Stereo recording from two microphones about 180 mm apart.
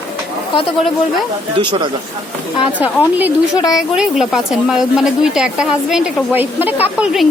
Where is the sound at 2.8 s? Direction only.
10° right (ahead or behind).